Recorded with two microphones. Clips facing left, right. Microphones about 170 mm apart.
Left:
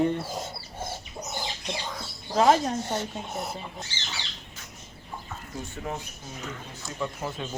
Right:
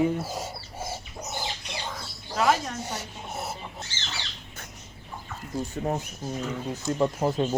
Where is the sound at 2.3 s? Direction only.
35° left (ahead or behind).